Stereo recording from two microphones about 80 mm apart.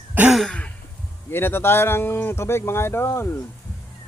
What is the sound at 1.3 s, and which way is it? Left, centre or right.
Speech, left.